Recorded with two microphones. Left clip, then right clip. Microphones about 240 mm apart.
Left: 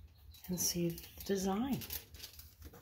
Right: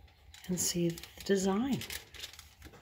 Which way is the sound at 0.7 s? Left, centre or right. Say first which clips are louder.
Right 5 dB; right.